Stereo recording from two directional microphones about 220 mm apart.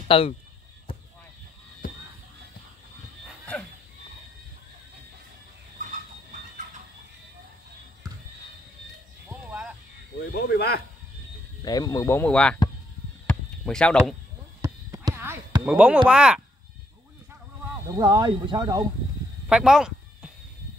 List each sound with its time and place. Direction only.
0.1 s speech: 25° left (ahead or behind)
0.9 s basketball bounce: 25° left (ahead or behind)
3.3 s a sound: 5° left (ahead or behind)
9.3 s music: 5° right (ahead or behind)
10.3 s speech: 45° left (ahead or behind)
11.6 s speech: 15° left (ahead or behind)
13.3 s a sound: 5° left (ahead or behind)
14.6 s a sound: 15° right (ahead or behind)
16.1 s speech: 5° right (ahead or behind)
17.9 s speech: 15° right (ahead or behind)
19.5 s sheep: centre (ahead or behind)